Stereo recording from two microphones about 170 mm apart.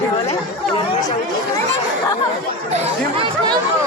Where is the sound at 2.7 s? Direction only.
30° right (ahead or behind).